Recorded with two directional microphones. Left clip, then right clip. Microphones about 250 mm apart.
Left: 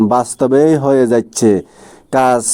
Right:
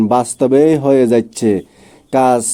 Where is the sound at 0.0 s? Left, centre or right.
Centre.